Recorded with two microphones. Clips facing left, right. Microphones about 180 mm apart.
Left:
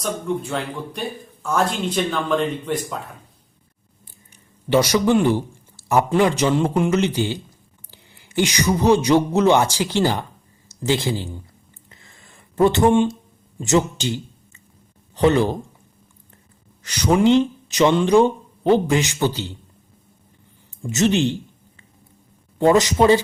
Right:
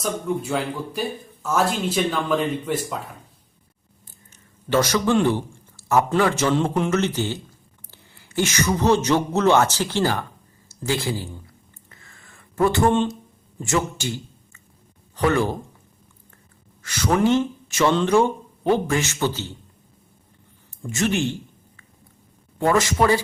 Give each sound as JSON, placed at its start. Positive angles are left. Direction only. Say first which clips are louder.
{"t": 0.0, "sound": "speech", "louder": "left 1 dB", "side_deg": -5}
{"t": 4.0, "sound": "a woman's voice", "louder": "left 1 dB", "side_deg": 10}
{"t": 11.9, "sound": "a sound", "louder": "left 1 dB", "side_deg": 20}
{"t": 13.6, "sound": "speech", "louder": "left 5 dB", "side_deg": 20}
{"t": 16.8, "sound": "speech", "louder": "left 3 dB", "side_deg": 20}
{"t": 20.8, "sound": "speech", "louder": "left 4 dB", "side_deg": 20}
{"t": 22.6, "sound": "speech", "louder": "left 4 dB", "side_deg": 20}